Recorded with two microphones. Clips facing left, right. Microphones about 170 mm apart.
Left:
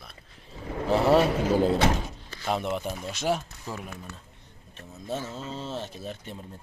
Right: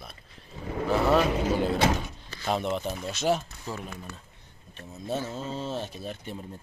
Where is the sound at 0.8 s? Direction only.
30° left (ahead or behind).